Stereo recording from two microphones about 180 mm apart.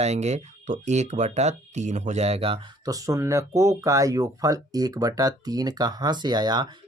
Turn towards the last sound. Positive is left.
turn(degrees=-25)  # may be behind; listen again after turning